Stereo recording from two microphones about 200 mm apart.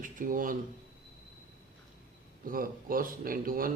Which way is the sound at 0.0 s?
45° right (ahead or behind).